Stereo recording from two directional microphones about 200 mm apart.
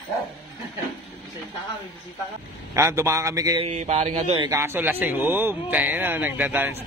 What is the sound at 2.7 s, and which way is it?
Speech, 15° right (ahead or behind).